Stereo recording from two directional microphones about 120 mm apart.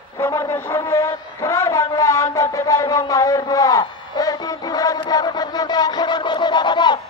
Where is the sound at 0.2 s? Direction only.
25° left (ahead or behind).